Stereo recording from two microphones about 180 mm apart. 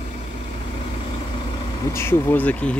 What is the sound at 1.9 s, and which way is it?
Speech, 10° left (ahead or behind).